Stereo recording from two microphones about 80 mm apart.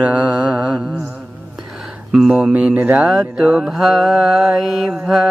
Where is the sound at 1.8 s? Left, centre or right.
Centre.